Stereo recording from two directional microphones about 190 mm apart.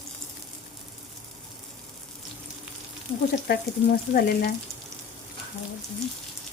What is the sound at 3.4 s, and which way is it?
Frying, 55° left (ahead or behind).